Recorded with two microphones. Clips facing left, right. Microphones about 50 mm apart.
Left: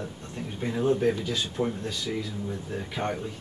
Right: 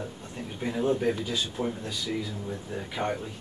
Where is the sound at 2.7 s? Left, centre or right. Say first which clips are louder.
Right 1 dB; centre.